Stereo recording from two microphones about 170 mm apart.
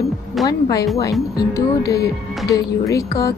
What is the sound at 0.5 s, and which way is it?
Speech, 20° left (ahead or behind).